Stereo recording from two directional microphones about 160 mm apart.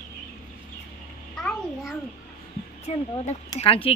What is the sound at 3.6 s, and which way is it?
Speech, 35° left (ahead or behind).